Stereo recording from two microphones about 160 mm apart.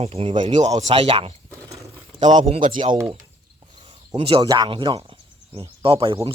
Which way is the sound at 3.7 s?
30° right (ahead or behind).